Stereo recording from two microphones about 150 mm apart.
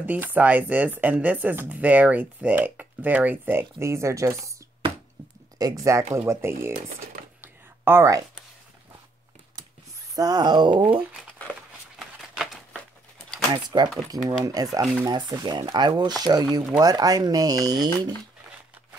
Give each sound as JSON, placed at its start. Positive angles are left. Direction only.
{"t": 0.0, "sound": "speech", "side_deg": -10}
{"t": 5.6, "sound": "speech", "side_deg": -25}
{"t": 7.4, "sound": "a sound", "side_deg": -15}
{"t": 10.1, "sound": "speech", "side_deg": -25}
{"t": 13.5, "sound": "speech", "side_deg": -30}